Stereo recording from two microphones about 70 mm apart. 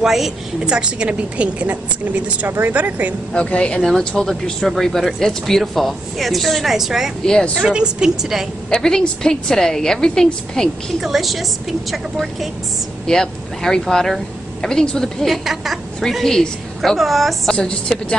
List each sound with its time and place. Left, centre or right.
0.0 s a woman's voice: centre; by 3.2 s right
3.3 s a woman's voice: centre
8.6 s a woman's voice: centre
17.6 s a woman's voice: centre